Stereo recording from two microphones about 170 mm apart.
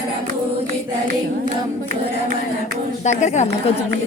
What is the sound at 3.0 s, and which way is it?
Speech, 45° left (ahead or behind).